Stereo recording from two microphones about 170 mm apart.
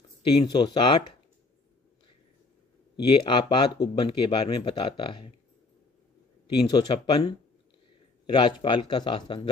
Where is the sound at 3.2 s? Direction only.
30° left (ahead or behind).